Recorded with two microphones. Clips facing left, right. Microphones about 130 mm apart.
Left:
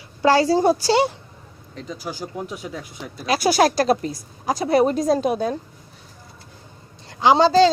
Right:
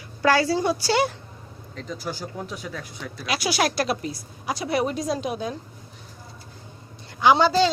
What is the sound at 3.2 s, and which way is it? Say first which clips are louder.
A woman's voice: left 7 dB; 45° left (ahead or behind).